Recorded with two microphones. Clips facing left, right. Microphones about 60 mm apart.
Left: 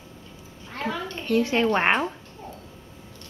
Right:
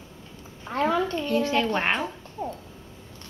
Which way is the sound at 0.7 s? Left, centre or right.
Right.